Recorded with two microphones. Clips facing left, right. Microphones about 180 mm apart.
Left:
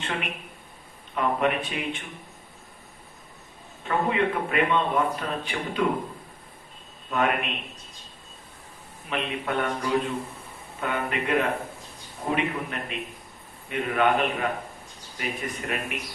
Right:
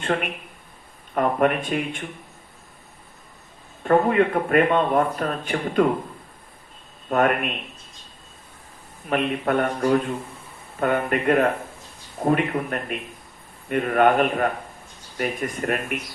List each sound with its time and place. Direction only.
0.0 s a man's voice: 55° right (ahead or behind)
3.8 s a man's voice: 50° right (ahead or behind)
7.1 s a man's voice: 50° right (ahead or behind)
9.0 s a man's voice: 50° right (ahead or behind)